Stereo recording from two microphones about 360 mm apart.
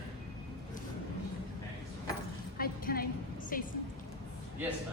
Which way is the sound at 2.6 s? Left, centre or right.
Left.